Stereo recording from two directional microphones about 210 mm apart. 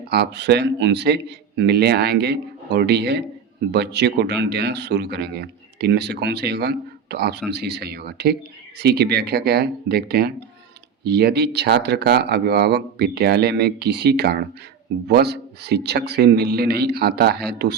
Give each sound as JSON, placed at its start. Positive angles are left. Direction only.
{"t": 0.0, "sound": "speech", "side_deg": -50}